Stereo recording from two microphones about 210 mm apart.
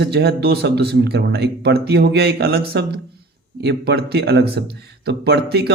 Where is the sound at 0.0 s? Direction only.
50° right (ahead or behind).